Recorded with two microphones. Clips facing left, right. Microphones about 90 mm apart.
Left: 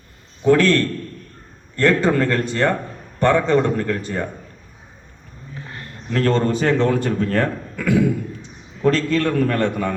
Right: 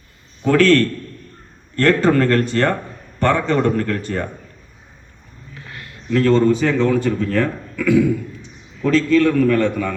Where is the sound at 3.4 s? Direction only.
20° left (ahead or behind).